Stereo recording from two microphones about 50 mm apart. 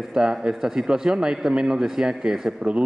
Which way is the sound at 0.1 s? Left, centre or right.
Centre.